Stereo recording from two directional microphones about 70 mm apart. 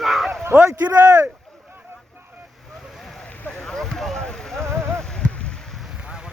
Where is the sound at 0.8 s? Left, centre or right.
Right.